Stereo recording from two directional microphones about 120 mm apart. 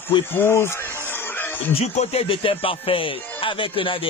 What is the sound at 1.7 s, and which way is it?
Speech, 65° left (ahead or behind).